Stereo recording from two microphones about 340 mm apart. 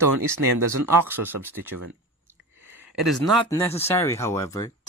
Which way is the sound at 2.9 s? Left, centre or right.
Centre.